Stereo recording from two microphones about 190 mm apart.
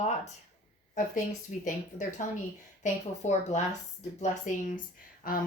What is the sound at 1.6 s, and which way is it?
A woman's voice, 40° left (ahead or behind).